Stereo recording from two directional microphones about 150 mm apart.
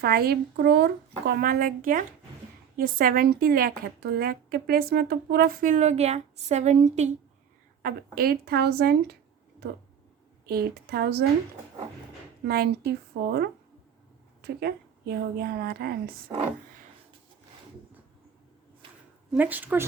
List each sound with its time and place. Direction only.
0.0 s a woman's voice: 90° right; by 7.1 s 50° right (ahead or behind)
7.8 s speech: 80° right
10.4 s speech: 90° right
12.5 s speech: 90° right
14.4 s speech: 90° right
19.3 s speech: 10° right (ahead or behind)